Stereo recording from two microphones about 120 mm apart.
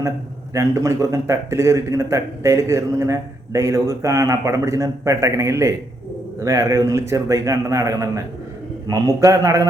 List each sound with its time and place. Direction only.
0.5 s a man's voice: 25° right (ahead or behind)